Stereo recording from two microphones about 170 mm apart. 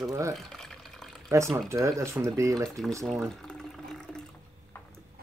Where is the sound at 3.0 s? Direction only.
Centre (ahead or behind).